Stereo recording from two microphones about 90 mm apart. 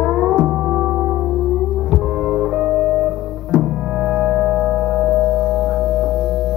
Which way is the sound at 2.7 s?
15° right (ahead or behind).